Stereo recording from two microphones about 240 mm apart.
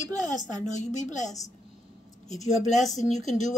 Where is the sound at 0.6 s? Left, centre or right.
Left.